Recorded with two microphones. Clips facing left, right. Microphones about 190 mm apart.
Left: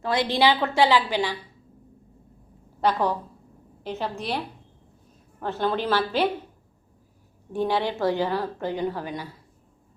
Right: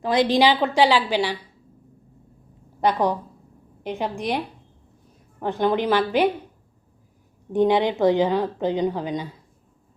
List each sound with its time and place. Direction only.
0.0 s a woman's voice: 15° right (ahead or behind)
2.8 s a woman's voice: 15° right (ahead or behind)
7.5 s a woman's voice: 20° right (ahead or behind)